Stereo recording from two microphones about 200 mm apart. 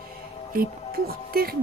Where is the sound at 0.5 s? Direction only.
50° right (ahead or behind).